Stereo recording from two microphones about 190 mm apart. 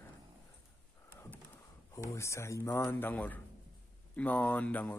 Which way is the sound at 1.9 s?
15° left (ahead or behind).